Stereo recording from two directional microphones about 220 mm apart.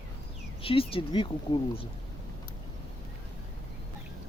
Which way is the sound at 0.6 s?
25° left (ahead or behind).